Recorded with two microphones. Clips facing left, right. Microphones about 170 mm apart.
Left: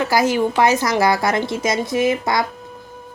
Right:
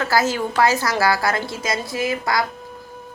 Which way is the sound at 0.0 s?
15° left (ahead or behind).